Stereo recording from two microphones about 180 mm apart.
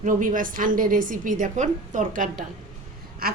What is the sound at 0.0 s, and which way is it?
A woman's voice, 45° right (ahead or behind).